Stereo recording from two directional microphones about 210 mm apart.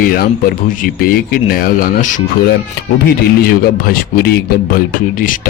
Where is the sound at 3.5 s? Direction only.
45° left (ahead or behind).